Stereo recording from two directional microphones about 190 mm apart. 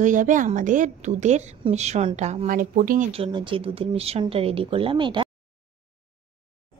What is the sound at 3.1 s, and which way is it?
Speech, 25° right (ahead or behind).